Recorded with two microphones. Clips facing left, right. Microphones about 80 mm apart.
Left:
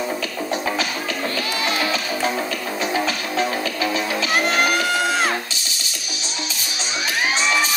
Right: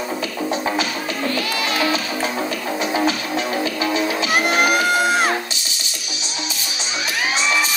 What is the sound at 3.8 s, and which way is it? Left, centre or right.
Music, right.